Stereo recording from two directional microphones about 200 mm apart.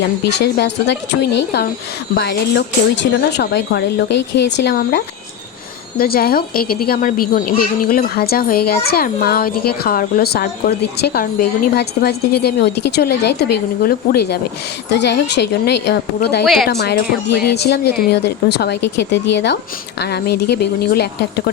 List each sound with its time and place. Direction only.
0.3 s a woman's voice: 60° left (ahead or behind)
16.4 s a woman's voice: centre (ahead or behind)
16.6 s speech: 55° left (ahead or behind)